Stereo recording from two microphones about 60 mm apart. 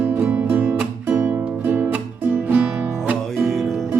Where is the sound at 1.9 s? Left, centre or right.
Right.